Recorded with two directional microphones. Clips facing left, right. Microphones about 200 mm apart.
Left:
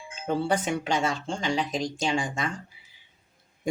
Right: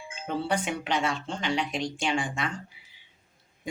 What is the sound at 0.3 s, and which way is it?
Speech, 45° left (ahead or behind).